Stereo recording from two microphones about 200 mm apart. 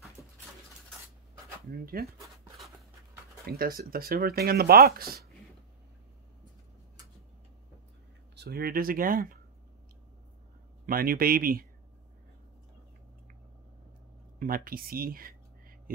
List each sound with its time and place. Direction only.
1.7 s speech: 50° right (ahead or behind)
3.4 s speech: 45° right (ahead or behind)
8.4 s speech: 50° right (ahead or behind)
10.9 s speech: 45° right (ahead or behind)
14.4 s speech: 45° right (ahead or behind)